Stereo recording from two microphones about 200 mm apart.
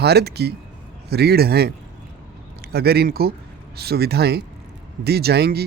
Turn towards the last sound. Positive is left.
turn(degrees=-55)  # may be behind; listen again after turning